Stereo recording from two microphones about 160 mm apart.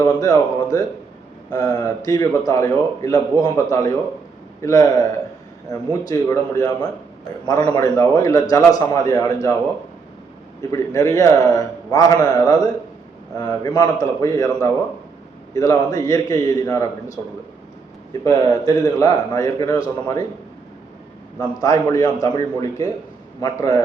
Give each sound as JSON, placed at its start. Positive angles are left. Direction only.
{"t": 0.0, "sound": "a man's voice", "side_deg": 20}
{"t": 6.1, "sound": "a man's voice", "side_deg": 20}
{"t": 10.6, "sound": "a man's voice", "side_deg": 20}
{"t": 18.3, "sound": "a man's voice", "side_deg": 20}
{"t": 21.3, "sound": "a man's voice", "side_deg": 20}
{"t": 23.4, "sound": "a man's voice", "side_deg": 20}